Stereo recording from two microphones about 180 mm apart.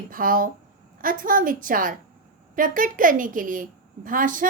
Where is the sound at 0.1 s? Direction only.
50° right (ahead or behind).